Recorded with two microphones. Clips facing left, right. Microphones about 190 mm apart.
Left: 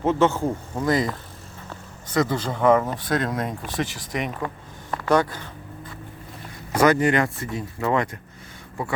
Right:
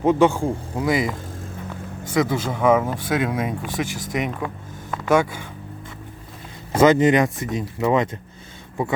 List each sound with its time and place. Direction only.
0.0 s speech: 15° right (ahead or behind)
2.1 s speech: 5° right (ahead or behind)
3.8 s speech: 45° right (ahead or behind)
4.1 s speech: 5° right (ahead or behind)
6.7 s speech: 20° right (ahead or behind)